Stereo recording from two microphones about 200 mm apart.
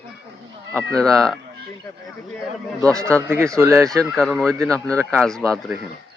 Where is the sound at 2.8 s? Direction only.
15° right (ahead or behind).